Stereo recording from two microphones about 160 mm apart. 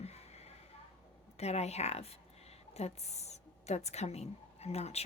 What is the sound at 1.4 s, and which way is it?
A woman's voice, 40° left (ahead or behind).